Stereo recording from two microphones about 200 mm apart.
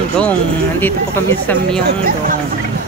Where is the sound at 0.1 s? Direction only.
5° left (ahead or behind).